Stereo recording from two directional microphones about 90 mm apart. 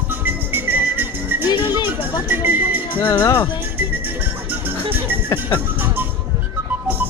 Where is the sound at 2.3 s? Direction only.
20° right (ahead or behind).